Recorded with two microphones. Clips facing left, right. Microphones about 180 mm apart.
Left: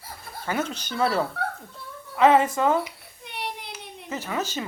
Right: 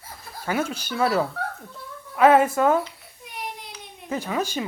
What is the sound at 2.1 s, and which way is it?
Speech, 10° right (ahead or behind).